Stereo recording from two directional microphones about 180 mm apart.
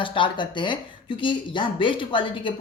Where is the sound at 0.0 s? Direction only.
30° left (ahead or behind).